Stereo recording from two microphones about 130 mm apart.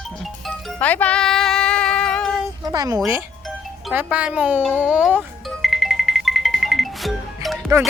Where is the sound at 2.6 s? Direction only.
25° right (ahead or behind).